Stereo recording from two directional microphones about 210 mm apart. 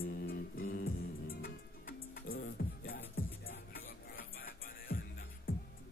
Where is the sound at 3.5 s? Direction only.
70° left (ahead or behind).